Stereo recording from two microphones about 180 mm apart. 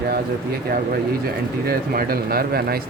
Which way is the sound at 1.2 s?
55° right (ahead or behind).